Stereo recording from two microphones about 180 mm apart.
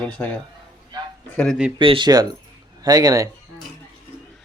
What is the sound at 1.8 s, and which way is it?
Speech, 25° right (ahead or behind).